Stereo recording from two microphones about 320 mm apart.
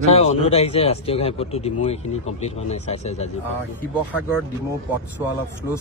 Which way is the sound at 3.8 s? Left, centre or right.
Centre.